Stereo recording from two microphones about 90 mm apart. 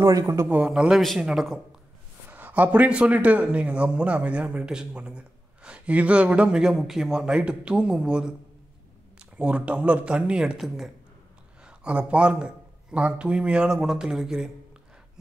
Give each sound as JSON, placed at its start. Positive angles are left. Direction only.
{"t": 0.0, "sound": "a man's voice", "side_deg": -40}
{"t": 0.5, "sound": "a man's voice", "side_deg": -10}
{"t": 2.2, "sound": "a man's voice", "side_deg": -20}
{"t": 9.4, "sound": "a man's voice", "side_deg": -15}